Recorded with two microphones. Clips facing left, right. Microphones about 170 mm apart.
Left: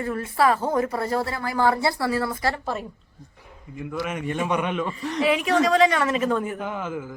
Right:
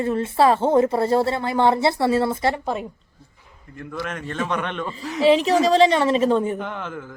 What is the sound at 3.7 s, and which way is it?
A man's voice, 10° left (ahead or behind).